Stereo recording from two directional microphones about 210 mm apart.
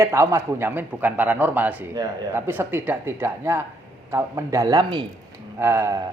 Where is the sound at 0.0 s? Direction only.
15° right (ahead or behind).